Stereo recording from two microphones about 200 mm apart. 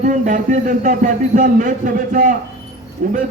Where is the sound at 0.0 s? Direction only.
40° right (ahead or behind).